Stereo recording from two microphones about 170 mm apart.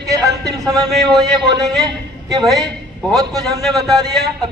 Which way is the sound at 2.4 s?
Centre (ahead or behind).